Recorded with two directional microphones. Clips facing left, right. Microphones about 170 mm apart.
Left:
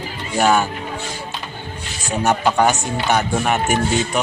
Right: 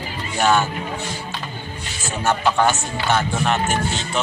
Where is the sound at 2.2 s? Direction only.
15° left (ahead or behind).